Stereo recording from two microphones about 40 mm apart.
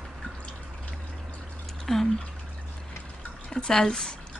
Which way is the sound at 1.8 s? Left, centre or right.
Centre.